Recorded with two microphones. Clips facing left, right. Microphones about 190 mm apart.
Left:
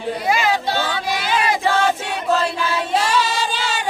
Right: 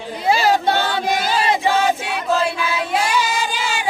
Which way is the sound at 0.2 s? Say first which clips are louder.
Right 4 dB; 30° right (ahead or behind).